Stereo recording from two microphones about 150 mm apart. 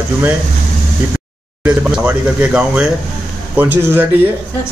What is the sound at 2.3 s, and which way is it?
Speech, 5° right (ahead or behind).